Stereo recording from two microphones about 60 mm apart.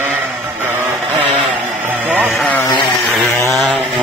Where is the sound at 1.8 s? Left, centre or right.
Right.